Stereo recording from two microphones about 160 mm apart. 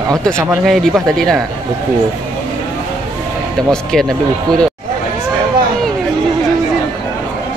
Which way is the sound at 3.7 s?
5° left (ahead or behind).